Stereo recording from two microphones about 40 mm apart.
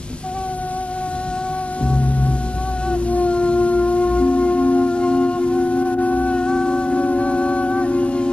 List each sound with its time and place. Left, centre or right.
2.9 s music: left